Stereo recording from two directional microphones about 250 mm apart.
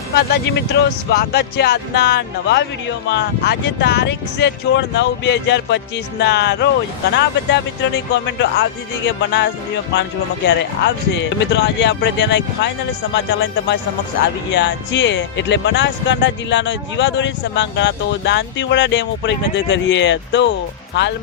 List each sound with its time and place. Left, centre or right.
0.1 s speech: left